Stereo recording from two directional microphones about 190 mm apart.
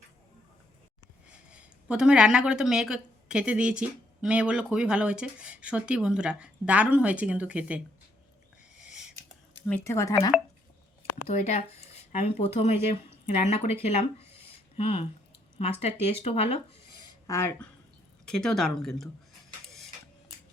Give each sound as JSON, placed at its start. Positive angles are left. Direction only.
{"t": 1.5, "sound": "speech", "side_deg": -5}
{"t": 8.8, "sound": "a sound", "side_deg": -5}
{"t": 9.8, "sound": "speech", "side_deg": 15}
{"t": 11.3, "sound": "speech", "side_deg": 35}
{"t": 17.0, "sound": "a sound", "side_deg": 15}
{"t": 18.3, "sound": "speech", "side_deg": 5}